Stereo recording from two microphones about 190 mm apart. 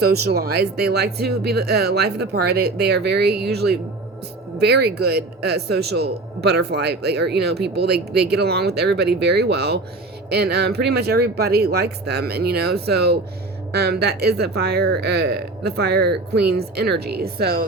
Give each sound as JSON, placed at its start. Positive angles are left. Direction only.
{"t": 0.0, "sound": "a man's voice", "side_deg": -60}